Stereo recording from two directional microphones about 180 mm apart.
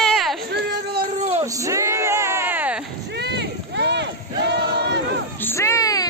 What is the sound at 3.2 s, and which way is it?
Crowd, 65° right (ahead or behind).